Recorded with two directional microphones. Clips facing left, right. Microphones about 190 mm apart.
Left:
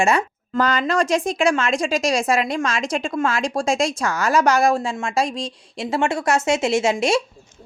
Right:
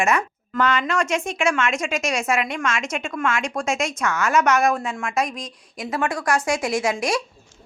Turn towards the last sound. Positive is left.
turn(degrees=25)  # may be behind; listen again after turning